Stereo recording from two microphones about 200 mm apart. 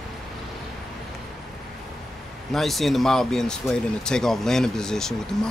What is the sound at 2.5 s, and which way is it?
Speech, centre (ahead or behind).